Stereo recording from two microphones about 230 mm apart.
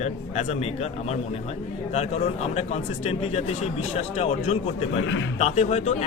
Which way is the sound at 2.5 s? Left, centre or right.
Left.